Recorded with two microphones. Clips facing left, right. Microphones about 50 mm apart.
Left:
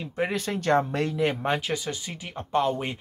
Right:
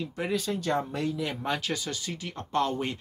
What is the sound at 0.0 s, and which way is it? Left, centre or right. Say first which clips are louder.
Speech: left 2 dB; left.